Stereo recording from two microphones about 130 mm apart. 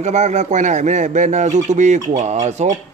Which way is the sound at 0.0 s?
65° right (ahead or behind).